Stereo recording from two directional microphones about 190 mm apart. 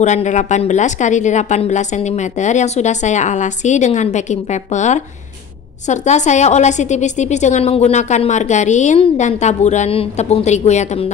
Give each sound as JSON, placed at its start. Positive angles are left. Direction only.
{"t": 0.0, "sound": "a woman's voice", "side_deg": 40}